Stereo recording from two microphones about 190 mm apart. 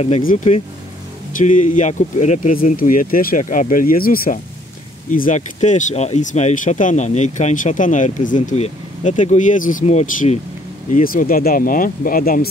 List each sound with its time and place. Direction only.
0.2 s speech: 45° left (ahead or behind)